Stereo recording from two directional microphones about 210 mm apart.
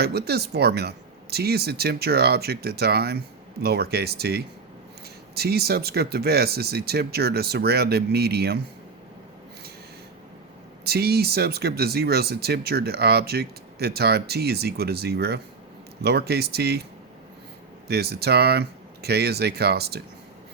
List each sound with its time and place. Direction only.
0.0 s speech: 50° right (ahead or behind)
10.8 s speech: 50° right (ahead or behind)
17.8 s speech: 50° right (ahead or behind)